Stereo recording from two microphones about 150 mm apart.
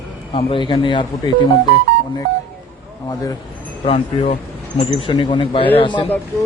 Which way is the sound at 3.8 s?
40° left (ahead or behind).